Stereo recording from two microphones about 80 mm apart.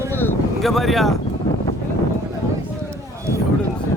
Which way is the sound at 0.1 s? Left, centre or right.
Left.